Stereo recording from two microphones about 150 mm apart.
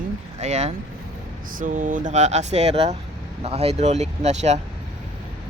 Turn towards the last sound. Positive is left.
turn(degrees=-50)  # may be behind; listen again after turning